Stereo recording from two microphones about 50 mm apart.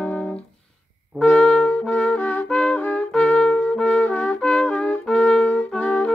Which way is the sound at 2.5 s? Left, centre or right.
Left.